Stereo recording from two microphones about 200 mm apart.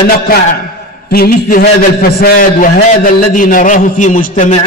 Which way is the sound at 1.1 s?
50° left (ahead or behind).